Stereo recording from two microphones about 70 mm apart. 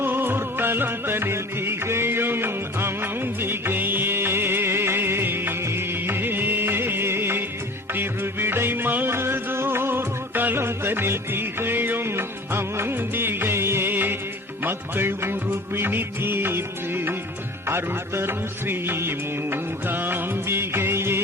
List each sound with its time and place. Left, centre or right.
0.0 s music: right
14.6 s music of bollywood: right